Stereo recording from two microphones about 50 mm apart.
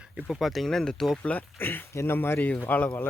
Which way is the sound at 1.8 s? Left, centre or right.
Left.